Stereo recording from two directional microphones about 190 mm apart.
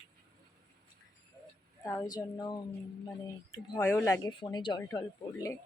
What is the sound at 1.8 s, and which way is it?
Speech, 15° left (ahead or behind).